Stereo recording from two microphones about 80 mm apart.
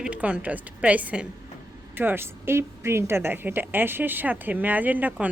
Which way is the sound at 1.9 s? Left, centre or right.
Right.